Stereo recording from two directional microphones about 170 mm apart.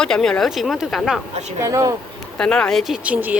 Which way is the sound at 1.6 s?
20° right (ahead or behind).